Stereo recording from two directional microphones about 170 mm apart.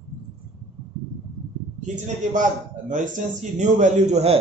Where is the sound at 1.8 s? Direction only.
45° right (ahead or behind).